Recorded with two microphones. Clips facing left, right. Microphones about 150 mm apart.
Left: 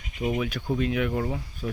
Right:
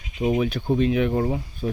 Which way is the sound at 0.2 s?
30° right (ahead or behind).